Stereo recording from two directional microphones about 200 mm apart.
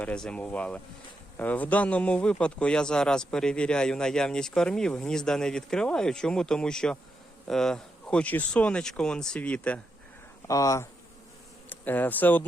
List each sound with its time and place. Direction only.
0.0 s speech: 5° left (ahead or behind)